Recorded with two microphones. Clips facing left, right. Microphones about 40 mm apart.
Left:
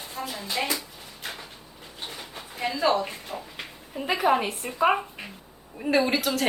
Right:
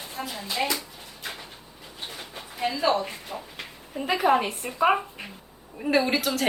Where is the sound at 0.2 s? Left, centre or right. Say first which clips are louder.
Even; right.